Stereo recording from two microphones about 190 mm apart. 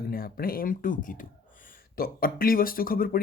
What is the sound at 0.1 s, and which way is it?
Speech, 50° left (ahead or behind).